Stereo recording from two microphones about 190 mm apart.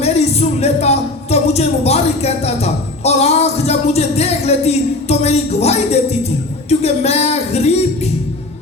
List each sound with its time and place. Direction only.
0.0 s speech: 35° left (ahead or behind)